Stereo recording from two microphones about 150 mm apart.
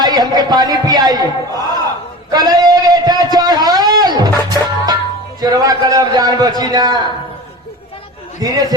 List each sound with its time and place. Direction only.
0.0 s a sound: 25° right (ahead or behind)
5.4 s a man's voice: 25° right (ahead or behind)
8.4 s a man's voice: 25° right (ahead or behind)